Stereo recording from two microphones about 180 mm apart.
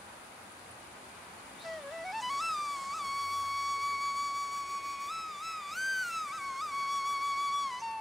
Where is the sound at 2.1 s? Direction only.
Centre (ahead or behind).